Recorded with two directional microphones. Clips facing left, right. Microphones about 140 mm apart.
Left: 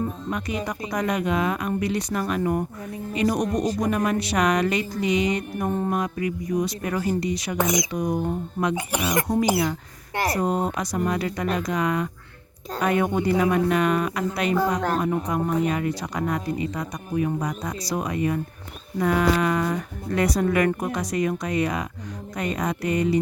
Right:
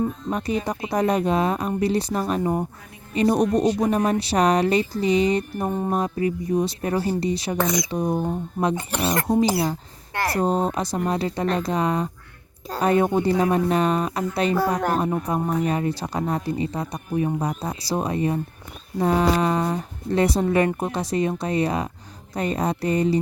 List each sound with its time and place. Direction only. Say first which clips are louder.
0.3 s speech: right 3 dB; 35° right (ahead or behind)
5.6 s music: even; 10° right (ahead or behind)
5.9 s speech: right 3 dB; 30° right (ahead or behind)
7.6 s speech: left 1 dB; 15° left (ahead or behind)
7.9 s speech: right 2 dB; 30° right (ahead or behind)
8.7 s speech: even; 10° left (ahead or behind)
9.2 s speech: right 2 dB; 25° right (ahead or behind)